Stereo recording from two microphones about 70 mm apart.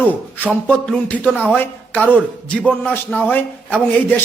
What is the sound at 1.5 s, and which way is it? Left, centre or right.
A man's voice, left.